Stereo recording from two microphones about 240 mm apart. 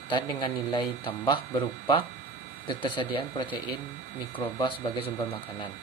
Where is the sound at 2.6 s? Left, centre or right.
Left.